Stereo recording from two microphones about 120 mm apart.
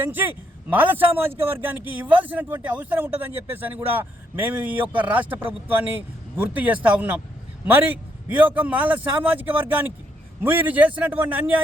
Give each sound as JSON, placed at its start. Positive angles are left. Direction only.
{"t": 0.0, "sound": "speech", "side_deg": -15}